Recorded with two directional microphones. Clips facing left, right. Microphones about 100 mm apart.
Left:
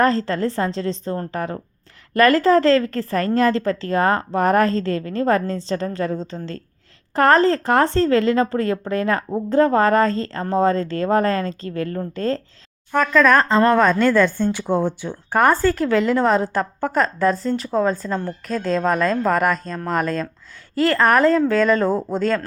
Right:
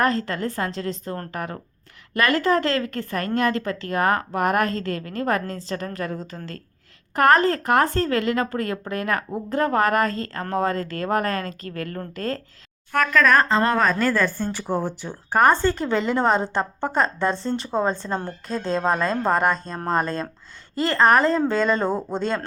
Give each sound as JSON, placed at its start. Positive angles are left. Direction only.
{"t": 0.0, "sound": "a woman's voice", "side_deg": 30}
{"t": 12.9, "sound": "speech", "side_deg": -5}
{"t": 15.6, "sound": "speech", "side_deg": -25}
{"t": 16.2, "sound": "speech", "side_deg": 0}
{"t": 16.5, "sound": "speech", "side_deg": -25}